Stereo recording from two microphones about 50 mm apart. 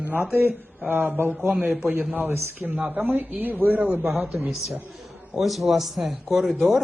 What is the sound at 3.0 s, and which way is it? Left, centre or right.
Speech, right.